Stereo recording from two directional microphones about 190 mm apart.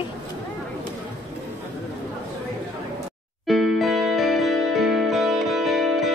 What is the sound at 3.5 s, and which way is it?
Music, centre (ahead or behind).